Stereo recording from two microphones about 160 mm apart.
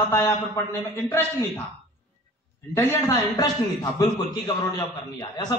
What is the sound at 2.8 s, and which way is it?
Speech, 15° left (ahead or behind).